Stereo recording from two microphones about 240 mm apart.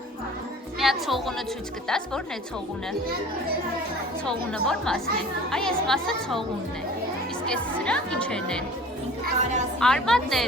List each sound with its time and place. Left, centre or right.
0.8 s a woman's voice: centre
4.3 s speech: centre
7.4 s speech: centre
9.2 s a woman's voice: right
9.8 s speech: centre